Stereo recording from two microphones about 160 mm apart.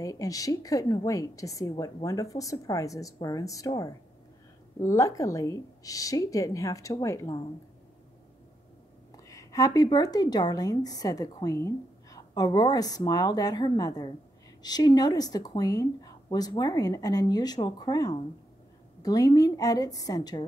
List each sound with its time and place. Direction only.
0.0 s speech: 20° left (ahead or behind)
9.1 s speech: 20° left (ahead or behind)